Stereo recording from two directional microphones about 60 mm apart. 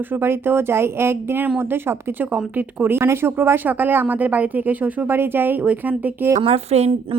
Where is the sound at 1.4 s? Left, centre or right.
Right.